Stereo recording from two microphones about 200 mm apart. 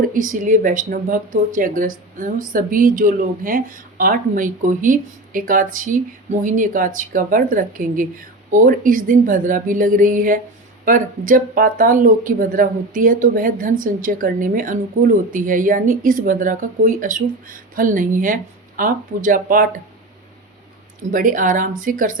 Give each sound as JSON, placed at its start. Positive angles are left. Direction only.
{"t": 0.0, "sound": "speech", "side_deg": -40}
{"t": 21.1, "sound": "speech", "side_deg": -40}